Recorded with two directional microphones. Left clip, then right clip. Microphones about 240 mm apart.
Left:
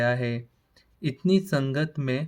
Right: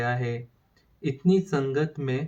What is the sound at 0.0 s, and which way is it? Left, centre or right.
Speech, left.